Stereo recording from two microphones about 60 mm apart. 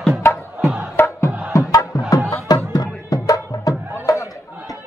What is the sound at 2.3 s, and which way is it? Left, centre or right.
Music, left.